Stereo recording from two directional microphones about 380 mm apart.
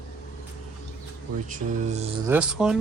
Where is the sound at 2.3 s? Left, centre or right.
Centre.